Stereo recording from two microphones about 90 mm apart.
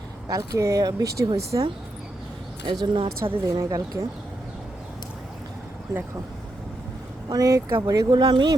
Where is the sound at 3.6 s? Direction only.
35° right (ahead or behind).